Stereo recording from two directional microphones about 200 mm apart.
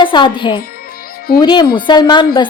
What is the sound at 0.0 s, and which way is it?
A woman's voice, 25° left (ahead or behind).